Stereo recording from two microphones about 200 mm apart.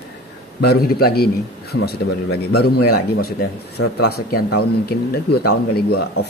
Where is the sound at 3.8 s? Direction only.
90° left.